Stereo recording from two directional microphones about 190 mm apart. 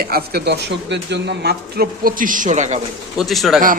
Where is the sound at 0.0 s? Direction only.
55° right (ahead or behind); by 2.8 s 40° right (ahead or behind).